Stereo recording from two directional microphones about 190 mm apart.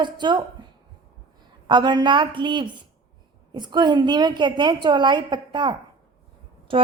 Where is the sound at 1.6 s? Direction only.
25° right (ahead or behind).